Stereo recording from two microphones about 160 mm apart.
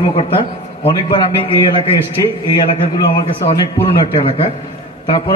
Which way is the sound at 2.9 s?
35° left (ahead or behind).